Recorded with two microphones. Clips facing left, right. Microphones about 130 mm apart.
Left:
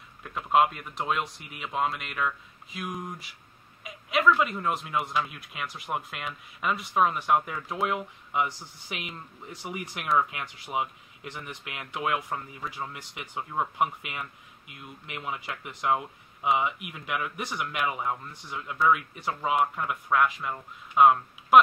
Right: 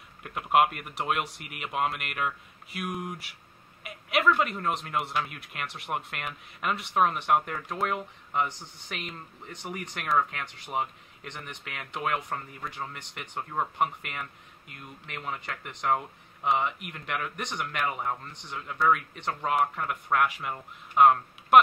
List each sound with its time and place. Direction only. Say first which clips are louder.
0.3 s speech: even; 5° right (ahead or behind)
1.1 s speech: even; 65° right (ahead or behind)
2.0 s speech: left 1 dB; 5° right (ahead or behind)
4.6 s speech: left 1 dB; 5° left (ahead or behind)